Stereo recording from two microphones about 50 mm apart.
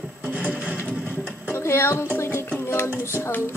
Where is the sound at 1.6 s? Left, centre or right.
Left.